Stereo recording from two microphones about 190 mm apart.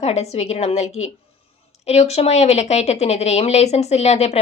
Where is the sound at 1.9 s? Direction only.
35° left (ahead or behind).